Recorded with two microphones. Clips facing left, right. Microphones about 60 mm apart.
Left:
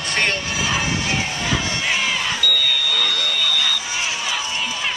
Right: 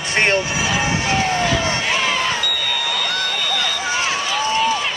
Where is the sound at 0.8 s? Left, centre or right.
Right.